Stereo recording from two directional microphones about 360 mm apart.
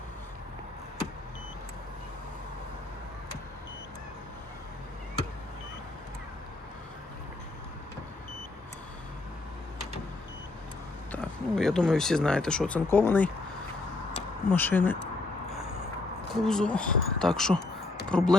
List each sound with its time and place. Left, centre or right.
11.1 s speech: centre
14.5 s speech: centre
16.3 s speech: centre